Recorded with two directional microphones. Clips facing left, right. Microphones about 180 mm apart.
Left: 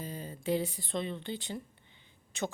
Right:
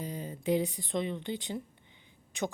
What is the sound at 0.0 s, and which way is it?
A woman's voice, 15° right (ahead or behind).